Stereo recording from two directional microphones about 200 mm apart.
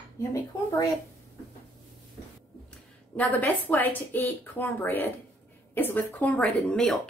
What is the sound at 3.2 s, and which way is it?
A woman's voice, 10° left (ahead or behind).